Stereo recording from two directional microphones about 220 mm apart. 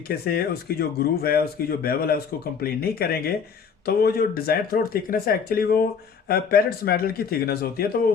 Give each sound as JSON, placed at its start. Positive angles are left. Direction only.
{"t": 0.1, "sound": "speech", "side_deg": 45}